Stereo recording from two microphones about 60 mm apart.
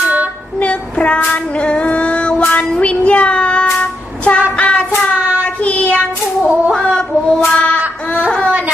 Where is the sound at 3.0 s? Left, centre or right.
Centre.